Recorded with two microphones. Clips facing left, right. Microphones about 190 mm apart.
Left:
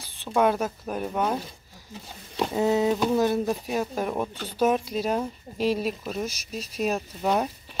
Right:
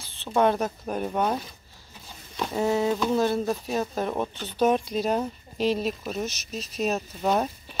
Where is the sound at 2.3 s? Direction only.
20° left (ahead or behind).